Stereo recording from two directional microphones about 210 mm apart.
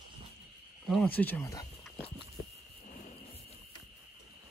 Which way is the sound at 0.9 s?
5° left (ahead or behind).